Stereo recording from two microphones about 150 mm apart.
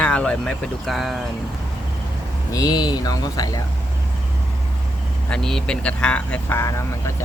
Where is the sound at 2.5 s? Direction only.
25° left (ahead or behind).